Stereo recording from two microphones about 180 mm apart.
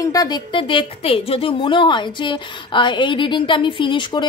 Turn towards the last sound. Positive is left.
turn(degrees=25)  # may be behind; listen again after turning